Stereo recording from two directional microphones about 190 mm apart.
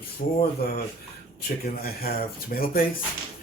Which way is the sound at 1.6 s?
55° left (ahead or behind).